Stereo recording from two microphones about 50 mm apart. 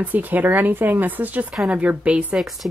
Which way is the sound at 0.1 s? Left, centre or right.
Right.